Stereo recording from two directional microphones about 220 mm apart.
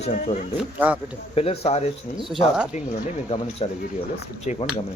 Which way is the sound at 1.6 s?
30° left (ahead or behind).